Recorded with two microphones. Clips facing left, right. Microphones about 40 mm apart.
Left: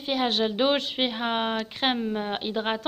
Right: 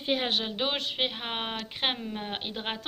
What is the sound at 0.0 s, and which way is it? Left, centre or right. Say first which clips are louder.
Speech: left 3 dB; right.